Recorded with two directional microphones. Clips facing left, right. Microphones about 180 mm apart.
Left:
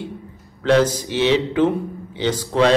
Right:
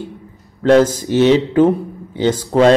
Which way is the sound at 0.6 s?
45° right (ahead or behind).